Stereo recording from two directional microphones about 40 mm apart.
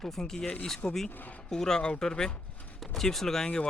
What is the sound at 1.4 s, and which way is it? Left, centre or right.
Speech, centre.